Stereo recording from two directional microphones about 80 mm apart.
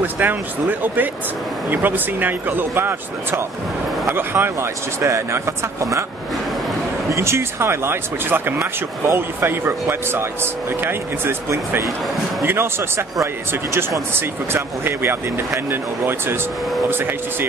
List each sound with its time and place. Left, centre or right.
0.0 s speech: right
7.1 s speech: right